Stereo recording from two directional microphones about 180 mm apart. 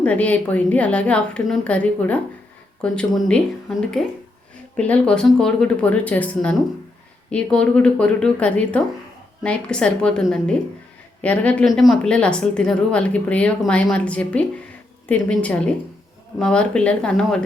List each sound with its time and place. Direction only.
0.0 s speech: 10° left (ahead or behind)